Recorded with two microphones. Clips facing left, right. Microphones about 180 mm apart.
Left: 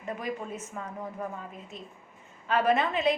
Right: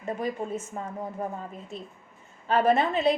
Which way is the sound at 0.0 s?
30° right (ahead or behind).